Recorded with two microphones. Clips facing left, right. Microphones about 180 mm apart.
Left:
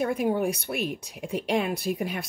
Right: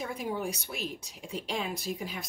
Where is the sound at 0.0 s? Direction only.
60° left (ahead or behind).